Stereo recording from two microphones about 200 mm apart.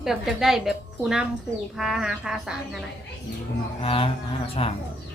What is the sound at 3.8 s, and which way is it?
Speech, 25° left (ahead or behind).